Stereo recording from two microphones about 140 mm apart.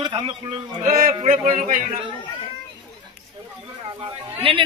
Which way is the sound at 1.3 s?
60° right (ahead or behind).